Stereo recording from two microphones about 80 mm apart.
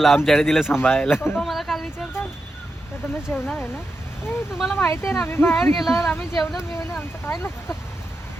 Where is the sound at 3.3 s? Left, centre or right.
Centre.